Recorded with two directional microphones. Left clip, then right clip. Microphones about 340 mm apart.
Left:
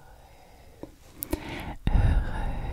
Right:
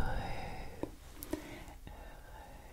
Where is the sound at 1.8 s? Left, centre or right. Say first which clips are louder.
Left 19 dB; left.